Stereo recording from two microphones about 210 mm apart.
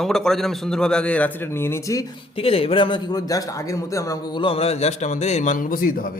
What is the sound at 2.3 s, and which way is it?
A man's voice, 25° left (ahead or behind).